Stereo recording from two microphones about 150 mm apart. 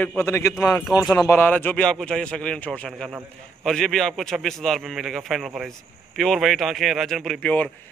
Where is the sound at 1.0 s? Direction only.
5° left (ahead or behind).